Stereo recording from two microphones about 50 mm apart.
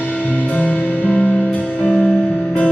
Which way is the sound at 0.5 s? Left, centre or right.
Left.